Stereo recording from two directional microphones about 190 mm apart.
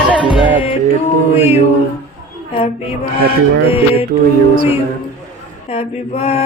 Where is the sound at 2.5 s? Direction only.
30° left (ahead or behind).